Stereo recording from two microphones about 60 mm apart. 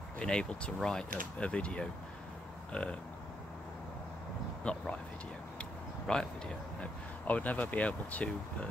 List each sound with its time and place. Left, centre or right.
0.2 s speech: centre
4.7 s speech: centre
5.6 s a sound: centre
7.2 s speech: left